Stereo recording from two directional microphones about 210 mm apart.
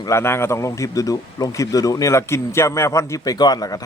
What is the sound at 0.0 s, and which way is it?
Speech, 15° left (ahead or behind).